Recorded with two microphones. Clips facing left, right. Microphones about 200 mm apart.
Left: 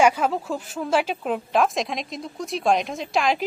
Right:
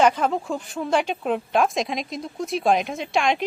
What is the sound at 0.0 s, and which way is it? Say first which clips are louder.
A woman's voice: even; 5° left (ahead or behind).